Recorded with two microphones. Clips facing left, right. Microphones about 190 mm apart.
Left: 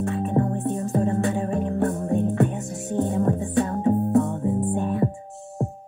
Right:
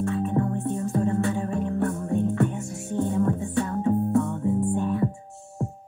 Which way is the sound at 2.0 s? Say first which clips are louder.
Left 1 dB; 15° left (ahead or behind).